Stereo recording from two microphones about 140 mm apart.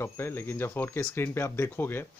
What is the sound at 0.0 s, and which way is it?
Speech, 15° left (ahead or behind).